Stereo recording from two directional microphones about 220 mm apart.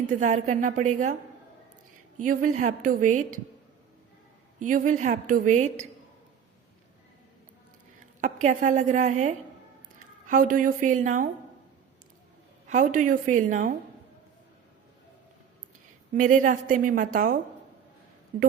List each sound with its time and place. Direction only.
0.1 s a woman's voice: 35° right (ahead or behind)
2.2 s a woman's voice: 35° right (ahead or behind)
4.6 s a woman's voice: 35° right (ahead or behind)
8.2 s a woman's voice: 35° right (ahead or behind)
12.6 s a woman's voice: 35° right (ahead or behind)
16.1 s a woman's voice: 35° right (ahead or behind)